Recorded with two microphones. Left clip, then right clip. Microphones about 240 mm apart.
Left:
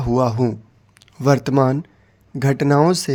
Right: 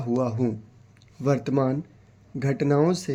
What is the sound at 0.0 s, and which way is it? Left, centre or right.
Speech, left.